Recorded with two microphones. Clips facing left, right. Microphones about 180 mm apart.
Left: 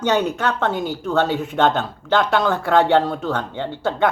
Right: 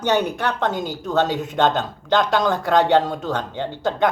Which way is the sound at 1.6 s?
15° right (ahead or behind).